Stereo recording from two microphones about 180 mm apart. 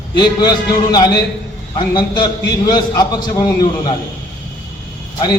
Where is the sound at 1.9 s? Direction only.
25° left (ahead or behind).